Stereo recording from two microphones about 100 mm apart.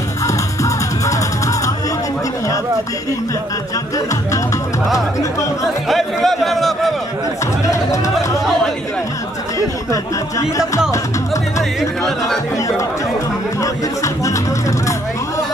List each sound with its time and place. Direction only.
4.9 s speech: 35° left (ahead or behind)
5.9 s speech: centre (ahead or behind)
13.6 s speech: 30° left (ahead or behind)